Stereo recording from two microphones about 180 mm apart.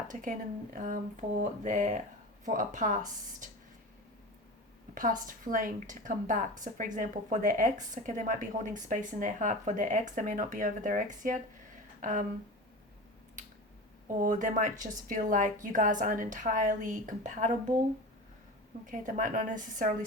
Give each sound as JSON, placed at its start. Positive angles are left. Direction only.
{"t": 0.1, "sound": "speech", "side_deg": -45}
{"t": 4.9, "sound": "speech", "side_deg": -50}
{"t": 14.2, "sound": "speech", "side_deg": -45}
{"t": 18.9, "sound": "speech", "side_deg": -45}